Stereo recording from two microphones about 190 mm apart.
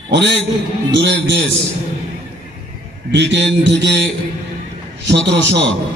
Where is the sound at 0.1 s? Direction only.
65° right (ahead or behind).